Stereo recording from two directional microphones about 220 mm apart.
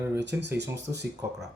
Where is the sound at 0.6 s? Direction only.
50° right (ahead or behind).